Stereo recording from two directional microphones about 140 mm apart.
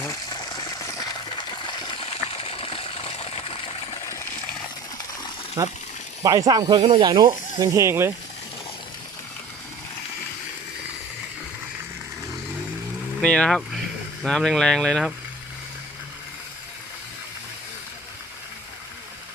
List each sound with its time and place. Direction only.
0.0 s coin: 25° left (ahead or behind)
2.0 s water: 45° left (ahead or behind)
5.6 s speech: 25° right (ahead or behind)
13.2 s speech: 5° left (ahead or behind)